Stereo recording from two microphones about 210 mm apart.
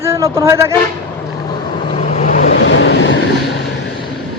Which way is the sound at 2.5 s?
60° left (ahead or behind).